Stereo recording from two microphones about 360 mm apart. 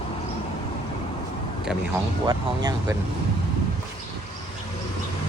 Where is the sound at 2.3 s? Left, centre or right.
Centre.